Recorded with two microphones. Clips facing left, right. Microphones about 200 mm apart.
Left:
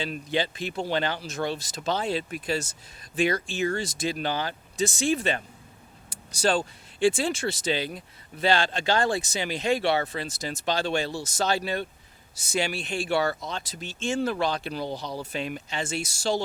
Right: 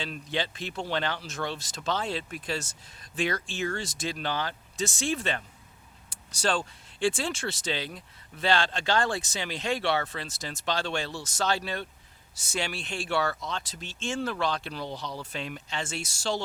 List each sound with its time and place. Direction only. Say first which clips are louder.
0.0 s speech: left 4 dB; 10° left (ahead or behind)
7.0 s speech: left 5 dB; 10° left (ahead or behind)
11.1 s speech: left 4 dB; 40° left (ahead or behind)
11.4 s speech: left 2 dB; 10° left (ahead or behind)